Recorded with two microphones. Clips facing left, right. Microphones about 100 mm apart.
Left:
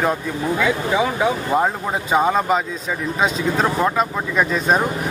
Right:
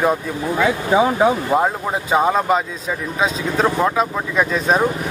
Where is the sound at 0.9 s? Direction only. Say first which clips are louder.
Right 8 dB; 35° right (ahead or behind).